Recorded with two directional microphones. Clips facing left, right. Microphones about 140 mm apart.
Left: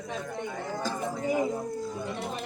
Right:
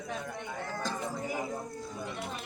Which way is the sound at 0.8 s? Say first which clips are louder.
Left 4 dB; 5° left (ahead or behind).